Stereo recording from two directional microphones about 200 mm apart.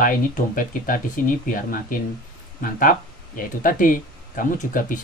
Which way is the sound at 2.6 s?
45° left (ahead or behind).